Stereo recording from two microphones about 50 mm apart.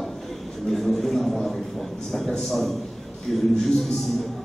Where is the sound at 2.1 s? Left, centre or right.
Centre.